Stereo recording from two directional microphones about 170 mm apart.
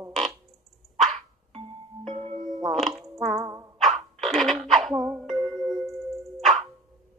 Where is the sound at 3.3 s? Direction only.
20° right (ahead or behind).